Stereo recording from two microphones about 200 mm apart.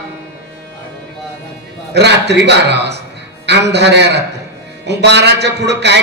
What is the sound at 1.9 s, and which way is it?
A man's voice, 55° right (ahead or behind).